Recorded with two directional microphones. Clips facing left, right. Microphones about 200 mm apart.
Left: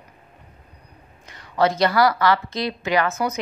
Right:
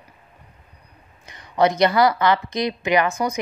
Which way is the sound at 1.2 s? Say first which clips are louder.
Right 1 dB; 20° right (ahead or behind).